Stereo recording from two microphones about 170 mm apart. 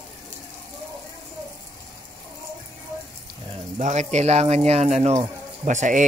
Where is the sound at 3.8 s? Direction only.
45° right (ahead or behind).